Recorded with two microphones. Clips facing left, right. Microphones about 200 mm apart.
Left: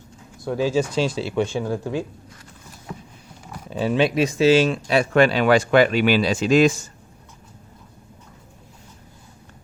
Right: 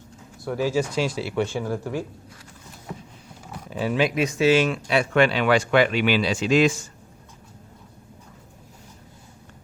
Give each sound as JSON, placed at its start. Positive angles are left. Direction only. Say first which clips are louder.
{"t": 0.4, "sound": "speech", "louder": "left 2 dB", "side_deg": 20}
{"t": 3.7, "sound": "speech", "louder": "left 3 dB", "side_deg": 30}